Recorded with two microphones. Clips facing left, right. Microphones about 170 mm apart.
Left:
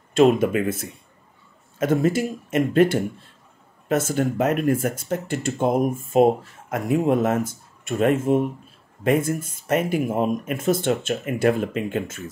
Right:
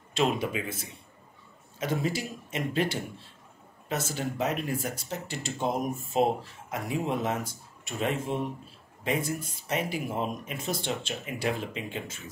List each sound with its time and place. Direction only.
0.1 s speech: 50° left (ahead or behind)